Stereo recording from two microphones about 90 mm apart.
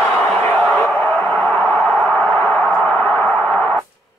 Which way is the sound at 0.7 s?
20° left (ahead or behind).